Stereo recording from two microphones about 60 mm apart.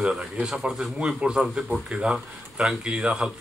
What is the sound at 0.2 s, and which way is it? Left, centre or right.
Speech, centre.